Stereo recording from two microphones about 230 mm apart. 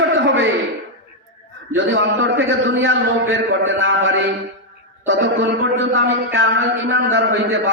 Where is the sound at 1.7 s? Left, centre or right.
Right.